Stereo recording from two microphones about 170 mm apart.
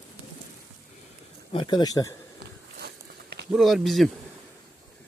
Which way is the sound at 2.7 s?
75° right (ahead or behind).